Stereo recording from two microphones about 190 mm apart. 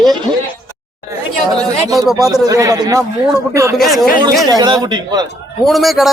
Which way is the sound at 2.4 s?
15° right (ahead or behind).